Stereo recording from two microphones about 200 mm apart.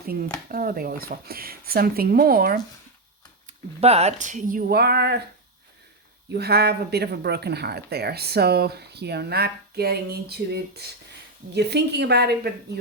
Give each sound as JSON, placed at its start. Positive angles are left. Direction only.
{"t": 0.4, "sound": "speech", "side_deg": -45}
{"t": 3.4, "sound": "speech", "side_deg": -30}
{"t": 6.3, "sound": "a woman's voice", "side_deg": -55}